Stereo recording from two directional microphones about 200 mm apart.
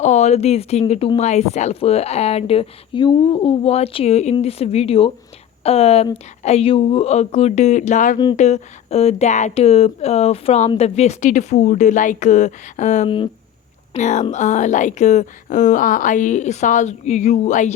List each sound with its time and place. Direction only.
0.0 s speech: 35° left (ahead or behind)